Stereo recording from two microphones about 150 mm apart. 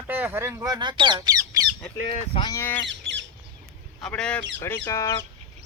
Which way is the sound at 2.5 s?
15° left (ahead or behind).